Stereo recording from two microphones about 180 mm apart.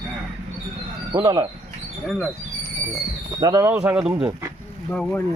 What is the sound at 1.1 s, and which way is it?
Speech, 20° right (ahead or behind).